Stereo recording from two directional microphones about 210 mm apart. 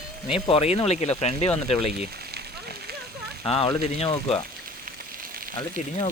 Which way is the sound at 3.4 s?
25° left (ahead or behind).